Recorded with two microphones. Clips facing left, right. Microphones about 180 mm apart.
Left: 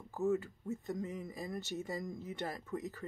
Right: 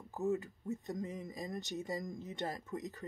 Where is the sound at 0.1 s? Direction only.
20° right (ahead or behind).